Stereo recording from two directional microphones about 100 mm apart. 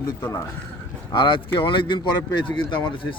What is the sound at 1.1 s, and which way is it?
Speech, 55° left (ahead or behind).